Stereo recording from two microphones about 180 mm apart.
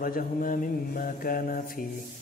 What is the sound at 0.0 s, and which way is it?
A man's voice, 50° left (ahead or behind).